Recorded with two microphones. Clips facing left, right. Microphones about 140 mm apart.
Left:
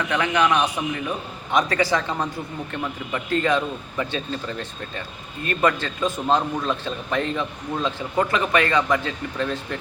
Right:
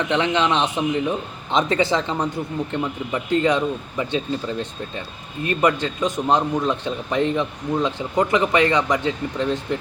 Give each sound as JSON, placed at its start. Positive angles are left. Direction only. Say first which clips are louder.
{"t": 0.0, "sound": "speech", "louder": "right 1 dB", "side_deg": -20}